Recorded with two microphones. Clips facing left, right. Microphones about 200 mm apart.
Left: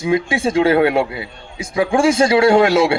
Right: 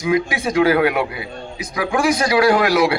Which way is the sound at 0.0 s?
25° left (ahead or behind).